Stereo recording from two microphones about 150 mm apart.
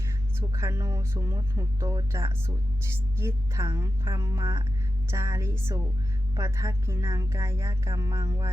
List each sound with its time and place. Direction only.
0.3 s a woman's voice: 20° right (ahead or behind)